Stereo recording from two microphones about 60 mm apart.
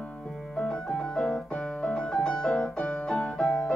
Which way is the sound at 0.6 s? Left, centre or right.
Centre.